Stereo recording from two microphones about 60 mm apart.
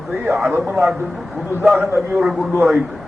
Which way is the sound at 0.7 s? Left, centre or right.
Centre.